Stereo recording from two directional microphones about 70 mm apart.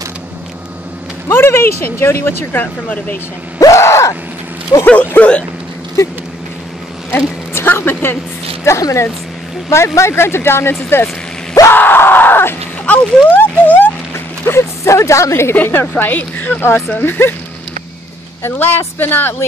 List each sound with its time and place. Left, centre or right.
1.3 s speech: left
2.6 s speech: left
3.5 s gasp: left
3.8 s groan: left
4.8 s speech: centre
7.1 s speech: left
8.7 s speech: left
9.9 s speech: left
11.7 s screaming: left
12.8 s a sound: left
14.4 s a sound: left
15.5 s speech: left
18.4 s speech: left